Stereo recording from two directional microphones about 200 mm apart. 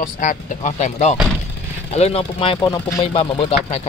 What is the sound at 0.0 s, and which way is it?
Speech, 40° left (ahead or behind).